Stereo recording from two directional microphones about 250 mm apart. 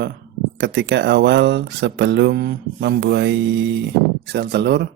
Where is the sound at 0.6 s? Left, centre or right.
Right.